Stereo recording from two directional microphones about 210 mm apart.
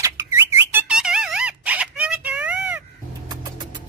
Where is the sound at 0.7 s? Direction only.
5° right (ahead or behind).